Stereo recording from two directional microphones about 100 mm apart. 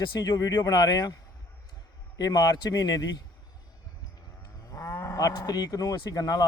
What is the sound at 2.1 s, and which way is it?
Speech, 40° left (ahead or behind).